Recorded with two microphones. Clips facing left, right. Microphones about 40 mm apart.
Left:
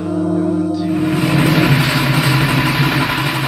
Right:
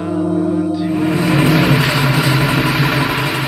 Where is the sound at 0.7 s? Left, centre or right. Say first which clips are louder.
Even; centre.